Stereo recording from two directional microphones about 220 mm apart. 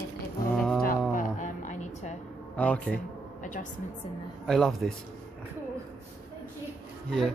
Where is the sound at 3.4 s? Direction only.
35° left (ahead or behind).